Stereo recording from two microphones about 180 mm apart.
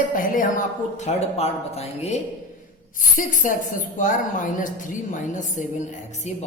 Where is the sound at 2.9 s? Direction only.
45° left (ahead or behind).